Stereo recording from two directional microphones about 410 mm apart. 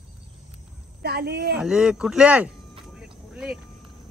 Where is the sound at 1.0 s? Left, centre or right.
Right.